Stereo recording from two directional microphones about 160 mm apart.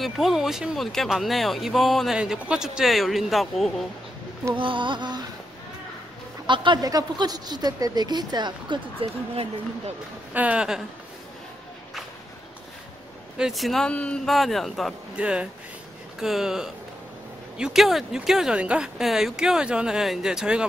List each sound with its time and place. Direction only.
0.0 s speech: centre (ahead or behind)
4.6 s speech: 30° right (ahead or behind)
6.4 s speech: 30° right (ahead or behind)
9.3 s speech: 40° right (ahead or behind)
10.3 s speech: 10° right (ahead or behind)
13.4 s speech: centre (ahead or behind)